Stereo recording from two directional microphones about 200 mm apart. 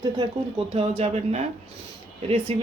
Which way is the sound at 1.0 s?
35° right (ahead or behind).